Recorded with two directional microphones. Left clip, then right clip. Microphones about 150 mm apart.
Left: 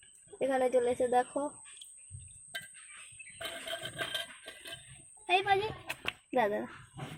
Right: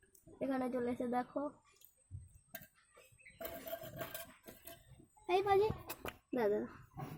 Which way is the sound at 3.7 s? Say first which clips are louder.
Left 12 dB; 20° right (ahead or behind).